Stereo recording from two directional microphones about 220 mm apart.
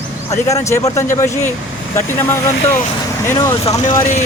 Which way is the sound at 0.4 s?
15° left (ahead or behind).